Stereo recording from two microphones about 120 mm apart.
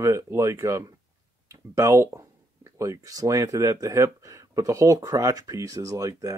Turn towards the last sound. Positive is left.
turn(degrees=-25)  # may be behind; listen again after turning